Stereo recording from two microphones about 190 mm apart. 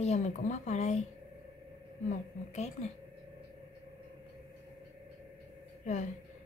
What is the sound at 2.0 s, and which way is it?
Speech, 35° left (ahead or behind).